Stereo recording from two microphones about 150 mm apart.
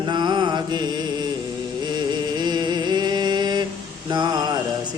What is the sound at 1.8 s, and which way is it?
Music, 30° right (ahead or behind).